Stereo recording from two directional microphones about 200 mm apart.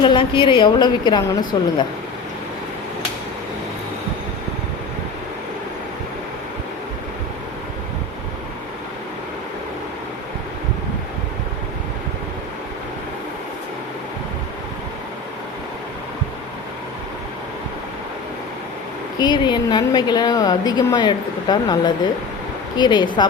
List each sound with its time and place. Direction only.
0.0 s speech: 25° left (ahead or behind)
19.2 s speech: 20° left (ahead or behind)